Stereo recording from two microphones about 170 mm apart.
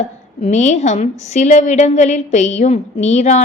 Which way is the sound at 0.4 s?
45° left (ahead or behind).